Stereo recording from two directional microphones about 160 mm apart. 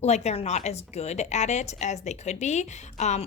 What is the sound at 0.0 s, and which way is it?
Speech, 45° left (ahead or behind).